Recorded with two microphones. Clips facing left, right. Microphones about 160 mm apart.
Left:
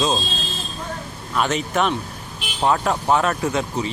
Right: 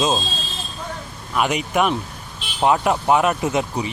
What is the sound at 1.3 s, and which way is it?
Speech, 15° right (ahead or behind).